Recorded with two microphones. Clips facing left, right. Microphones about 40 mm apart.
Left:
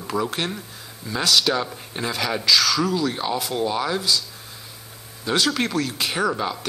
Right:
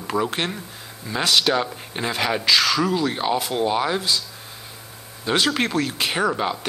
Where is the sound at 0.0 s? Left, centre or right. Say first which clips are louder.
Right 1 dB; centre.